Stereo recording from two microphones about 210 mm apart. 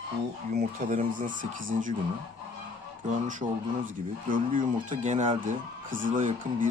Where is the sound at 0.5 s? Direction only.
40° right (ahead or behind).